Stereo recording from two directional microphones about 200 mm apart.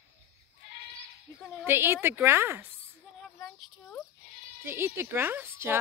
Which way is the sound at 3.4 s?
10° left (ahead or behind).